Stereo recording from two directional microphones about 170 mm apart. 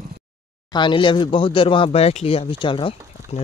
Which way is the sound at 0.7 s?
30° left (ahead or behind).